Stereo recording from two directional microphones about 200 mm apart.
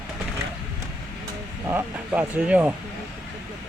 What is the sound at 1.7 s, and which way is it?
Speech, 10° right (ahead or behind).